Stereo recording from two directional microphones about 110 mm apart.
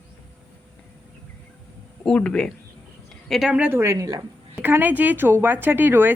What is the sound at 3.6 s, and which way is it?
Speech, 20° right (ahead or behind).